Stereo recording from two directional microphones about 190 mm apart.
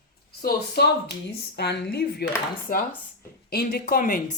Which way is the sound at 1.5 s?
60° left (ahead or behind).